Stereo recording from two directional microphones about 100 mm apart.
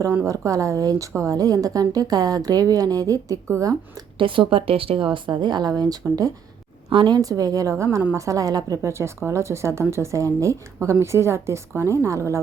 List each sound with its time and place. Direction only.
0.3 s a woman's voice: 35° right (ahead or behind)
4.2 s speech: 60° right (ahead or behind); by 6.3 s 40° right (ahead or behind)
6.9 s a woman's voice: 55° right (ahead or behind)
7.2 s a woman's voice: 40° right (ahead or behind)